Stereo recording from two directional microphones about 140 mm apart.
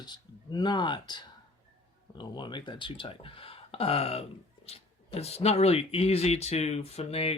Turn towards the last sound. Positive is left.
turn(degrees=45)  # may be behind; listen again after turning